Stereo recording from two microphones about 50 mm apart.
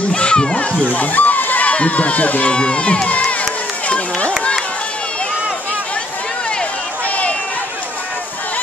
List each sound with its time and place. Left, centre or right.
0.1 s speech: centre
2.5 s crowd: left
3.8 s run: left